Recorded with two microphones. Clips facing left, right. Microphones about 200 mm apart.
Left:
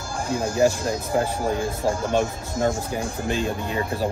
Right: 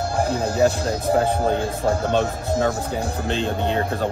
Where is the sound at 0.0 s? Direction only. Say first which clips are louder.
Right 4 dB; 60° right (ahead or behind).